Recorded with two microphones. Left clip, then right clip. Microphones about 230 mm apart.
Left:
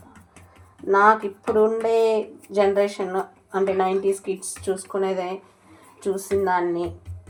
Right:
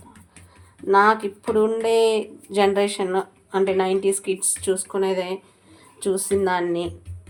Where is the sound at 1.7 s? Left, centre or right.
Right.